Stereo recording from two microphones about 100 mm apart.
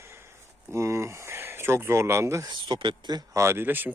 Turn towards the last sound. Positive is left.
turn(degrees=-20)  # may be behind; listen again after turning